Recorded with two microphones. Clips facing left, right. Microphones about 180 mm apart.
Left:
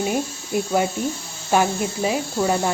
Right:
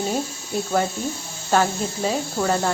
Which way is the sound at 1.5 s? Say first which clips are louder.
Left 1 dB; 10° left (ahead or behind).